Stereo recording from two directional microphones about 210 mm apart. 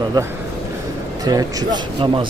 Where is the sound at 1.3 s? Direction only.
20° right (ahead or behind).